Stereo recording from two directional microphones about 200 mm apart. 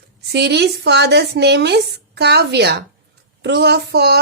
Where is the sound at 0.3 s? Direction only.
55° right (ahead or behind).